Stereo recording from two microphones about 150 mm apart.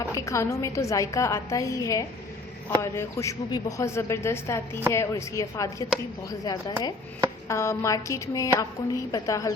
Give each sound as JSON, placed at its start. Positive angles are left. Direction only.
{"t": 0.1, "sound": "a woman's voice", "side_deg": 20}